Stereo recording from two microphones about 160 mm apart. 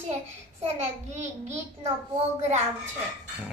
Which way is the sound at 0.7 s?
45° right (ahead or behind).